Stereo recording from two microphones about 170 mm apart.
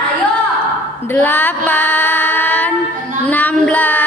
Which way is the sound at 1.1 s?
10° left (ahead or behind).